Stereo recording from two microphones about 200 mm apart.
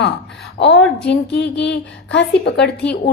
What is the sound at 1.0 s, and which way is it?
A woman's voice, 60° left (ahead or behind).